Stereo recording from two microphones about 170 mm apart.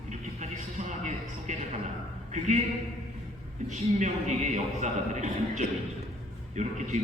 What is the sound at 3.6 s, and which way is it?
A man's voice, 45° right (ahead or behind).